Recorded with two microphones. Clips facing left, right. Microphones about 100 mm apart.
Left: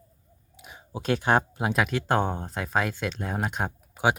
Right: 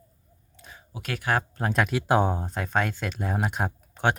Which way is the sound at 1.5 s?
5° left (ahead or behind).